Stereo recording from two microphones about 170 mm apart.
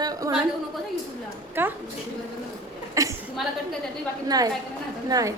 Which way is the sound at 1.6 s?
10° right (ahead or behind).